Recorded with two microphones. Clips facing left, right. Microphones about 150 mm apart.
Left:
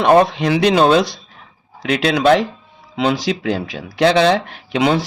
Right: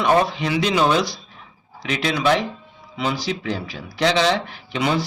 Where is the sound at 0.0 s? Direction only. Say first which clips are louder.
Left 6 dB; 55° left (ahead or behind).